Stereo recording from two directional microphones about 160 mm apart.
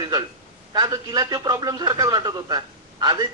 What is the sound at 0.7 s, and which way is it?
A man's voice, 25° right (ahead or behind).